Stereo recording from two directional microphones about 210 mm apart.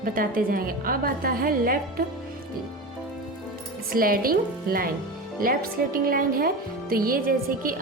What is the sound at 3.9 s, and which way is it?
A woman's voice, 45° right (ahead or behind).